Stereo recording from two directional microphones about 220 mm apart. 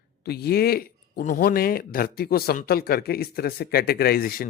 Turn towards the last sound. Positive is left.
turn(degrees=40)  # may be behind; listen again after turning